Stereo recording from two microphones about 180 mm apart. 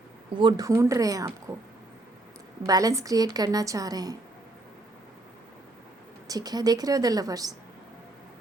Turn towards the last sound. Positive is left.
turn(degrees=-20)  # may be behind; listen again after turning